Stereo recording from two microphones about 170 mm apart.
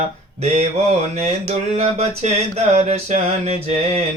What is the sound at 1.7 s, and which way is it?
Mantra, 40° right (ahead or behind).